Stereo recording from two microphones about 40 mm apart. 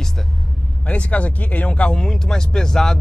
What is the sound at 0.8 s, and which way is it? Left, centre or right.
Speech, left.